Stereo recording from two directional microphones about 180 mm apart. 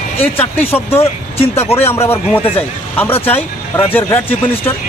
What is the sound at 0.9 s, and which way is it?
Speech, 35° left (ahead or behind).